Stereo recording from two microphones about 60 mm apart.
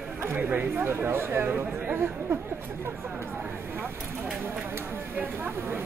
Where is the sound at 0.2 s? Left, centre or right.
Right.